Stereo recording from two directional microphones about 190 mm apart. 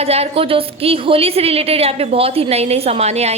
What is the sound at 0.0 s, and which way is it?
A woman's voice, 30° right (ahead or behind).